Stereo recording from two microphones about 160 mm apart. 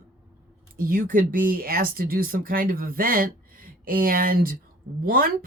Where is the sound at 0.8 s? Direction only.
60° right (ahead or behind).